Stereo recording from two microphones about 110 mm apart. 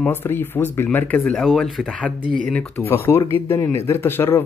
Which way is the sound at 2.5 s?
20° left (ahead or behind).